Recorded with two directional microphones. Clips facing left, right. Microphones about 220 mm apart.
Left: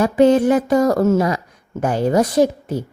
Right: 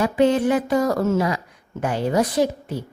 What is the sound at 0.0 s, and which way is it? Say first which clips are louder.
Speech: left 5 dB; 45° left (ahead or behind).